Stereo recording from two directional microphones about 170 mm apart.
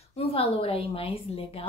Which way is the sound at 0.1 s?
35° left (ahead or behind).